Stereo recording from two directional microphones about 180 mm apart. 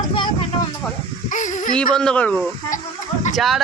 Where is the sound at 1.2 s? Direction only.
45° left (ahead or behind).